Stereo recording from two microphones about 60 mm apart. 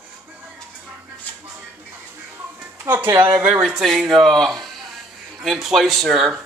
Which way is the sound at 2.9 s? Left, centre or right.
Right.